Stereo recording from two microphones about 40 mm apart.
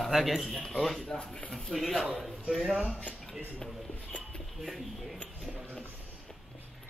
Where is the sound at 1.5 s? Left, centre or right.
Centre.